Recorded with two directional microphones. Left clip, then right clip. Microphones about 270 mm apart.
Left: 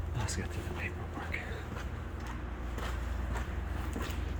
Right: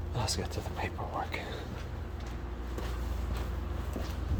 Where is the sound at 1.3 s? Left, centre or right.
Centre.